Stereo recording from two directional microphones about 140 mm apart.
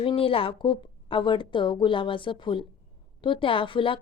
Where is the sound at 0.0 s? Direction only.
40° left (ahead or behind).